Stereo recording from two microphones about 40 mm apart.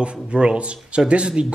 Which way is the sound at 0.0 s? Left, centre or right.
Right.